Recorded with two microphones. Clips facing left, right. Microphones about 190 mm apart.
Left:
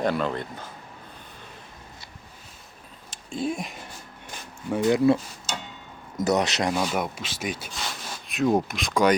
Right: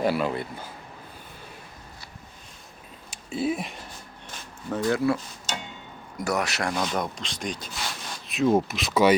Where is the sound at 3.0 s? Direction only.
10° right (ahead or behind).